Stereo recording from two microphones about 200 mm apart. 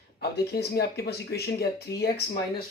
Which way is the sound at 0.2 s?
50° left (ahead or behind).